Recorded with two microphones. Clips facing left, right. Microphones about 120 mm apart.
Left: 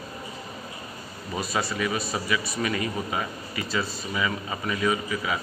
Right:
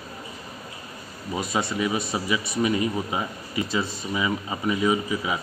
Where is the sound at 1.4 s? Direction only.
20° right (ahead or behind).